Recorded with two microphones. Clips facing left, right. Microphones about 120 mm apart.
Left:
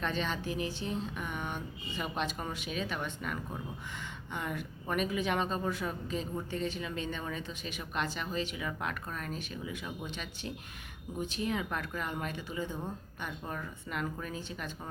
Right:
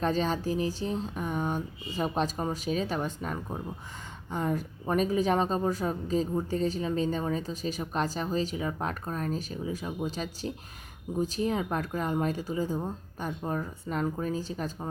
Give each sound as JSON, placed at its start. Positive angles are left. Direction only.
{"t": 0.0, "sound": "speech", "side_deg": -40}